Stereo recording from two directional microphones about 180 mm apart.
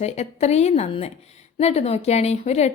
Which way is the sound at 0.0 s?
40° left (ahead or behind).